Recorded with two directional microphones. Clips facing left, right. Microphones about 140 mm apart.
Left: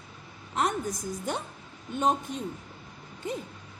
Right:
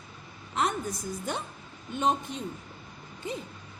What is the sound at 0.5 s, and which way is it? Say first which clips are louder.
A woman's voice: left 1 dB; 45° left (ahead or behind).